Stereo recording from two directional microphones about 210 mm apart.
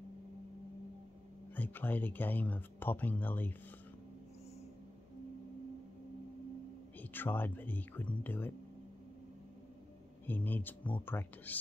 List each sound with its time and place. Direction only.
1.5 s speech: 10° left (ahead or behind)
7.0 s speech: 10° left (ahead or behind)
10.2 s speech: 10° left (ahead or behind)